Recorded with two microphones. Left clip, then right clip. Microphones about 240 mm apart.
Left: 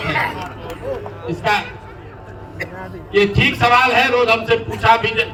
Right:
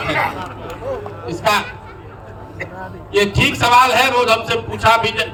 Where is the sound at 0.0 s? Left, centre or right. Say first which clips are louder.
Right 1 dB; centre.